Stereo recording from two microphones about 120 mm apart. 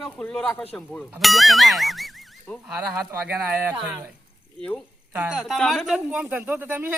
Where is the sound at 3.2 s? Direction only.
15° right (ahead or behind).